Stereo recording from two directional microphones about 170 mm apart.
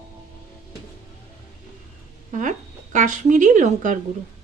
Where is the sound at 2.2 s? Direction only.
45° right (ahead or behind).